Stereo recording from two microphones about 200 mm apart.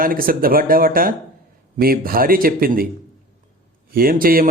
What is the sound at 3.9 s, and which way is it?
Speech, 45° right (ahead or behind).